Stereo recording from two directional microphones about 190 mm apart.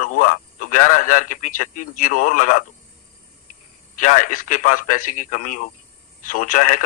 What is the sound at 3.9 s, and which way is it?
A man's voice, 40° left (ahead or behind).